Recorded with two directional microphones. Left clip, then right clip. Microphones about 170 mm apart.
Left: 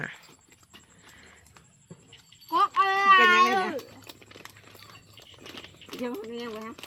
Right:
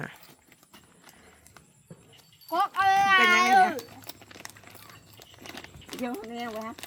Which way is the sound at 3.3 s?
15° right (ahead or behind).